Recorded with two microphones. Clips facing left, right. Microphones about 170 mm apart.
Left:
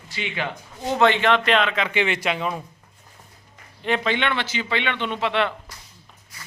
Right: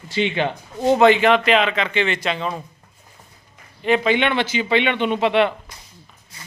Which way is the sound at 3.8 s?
5° right (ahead or behind).